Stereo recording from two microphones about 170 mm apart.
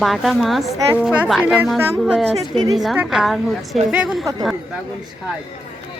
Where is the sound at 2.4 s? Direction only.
20° right (ahead or behind).